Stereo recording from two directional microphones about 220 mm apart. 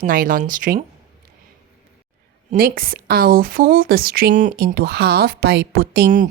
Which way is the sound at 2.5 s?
40° right (ahead or behind).